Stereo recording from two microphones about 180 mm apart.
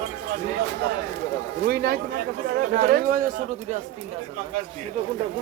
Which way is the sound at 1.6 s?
60° right (ahead or behind).